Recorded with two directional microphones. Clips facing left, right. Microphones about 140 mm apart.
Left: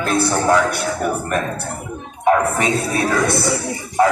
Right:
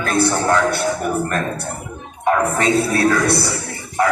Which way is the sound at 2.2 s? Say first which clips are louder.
Left 1 dB; 15° left (ahead or behind).